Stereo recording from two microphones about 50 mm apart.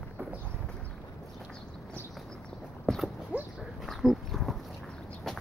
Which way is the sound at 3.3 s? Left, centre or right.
Right.